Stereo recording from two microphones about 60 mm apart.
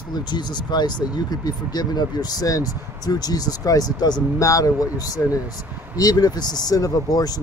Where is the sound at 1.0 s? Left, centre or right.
Left.